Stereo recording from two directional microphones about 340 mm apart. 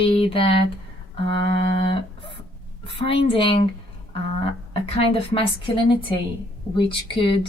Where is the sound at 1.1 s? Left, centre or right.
Centre.